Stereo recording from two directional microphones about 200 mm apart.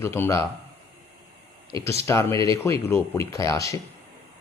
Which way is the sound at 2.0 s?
15° left (ahead or behind).